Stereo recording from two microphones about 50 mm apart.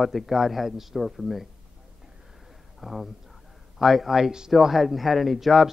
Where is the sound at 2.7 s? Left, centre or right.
Centre.